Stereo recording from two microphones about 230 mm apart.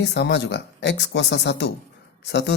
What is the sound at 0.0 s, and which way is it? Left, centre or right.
Speech, left.